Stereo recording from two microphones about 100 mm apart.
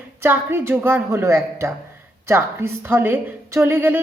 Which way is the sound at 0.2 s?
25° right (ahead or behind).